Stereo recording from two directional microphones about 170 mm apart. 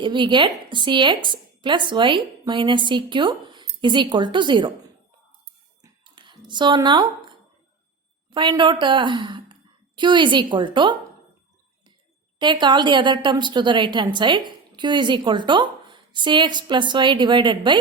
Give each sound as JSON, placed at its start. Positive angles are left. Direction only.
{"t": 0.0, "sound": "a woman's voice", "side_deg": -25}
{"t": 5.8, "sound": "a sound", "side_deg": -25}
{"t": 8.3, "sound": "a woman's voice", "side_deg": -25}
{"t": 12.4, "sound": "a woman's voice", "side_deg": -25}